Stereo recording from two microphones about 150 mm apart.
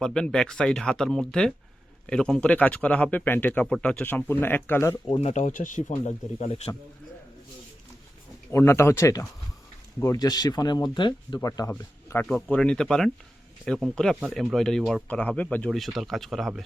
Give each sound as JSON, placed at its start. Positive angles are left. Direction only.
{"t": 0.0, "sound": "speech", "side_deg": 5}
{"t": 5.0, "sound": "speech", "side_deg": 40}
{"t": 5.9, "sound": "speech", "side_deg": 45}
{"t": 8.4, "sound": "speech", "side_deg": 15}